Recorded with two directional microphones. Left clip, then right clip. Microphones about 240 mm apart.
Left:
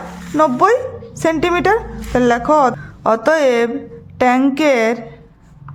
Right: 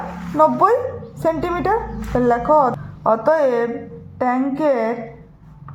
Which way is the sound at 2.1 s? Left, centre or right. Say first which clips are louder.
Left 2 dB; left.